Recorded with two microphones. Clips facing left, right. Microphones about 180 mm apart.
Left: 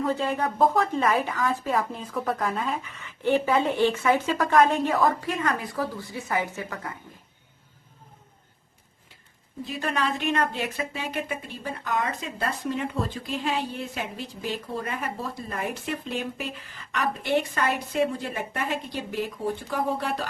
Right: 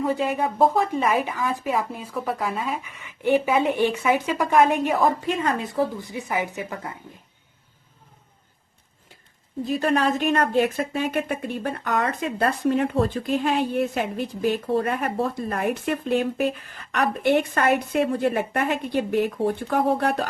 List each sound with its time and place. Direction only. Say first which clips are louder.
0.0 s a woman's voice: right 2 dB; 15° right (ahead or behind)
9.6 s a woman's voice: right 7 dB; 40° right (ahead or behind); by 20.2 s 60° right (ahead or behind)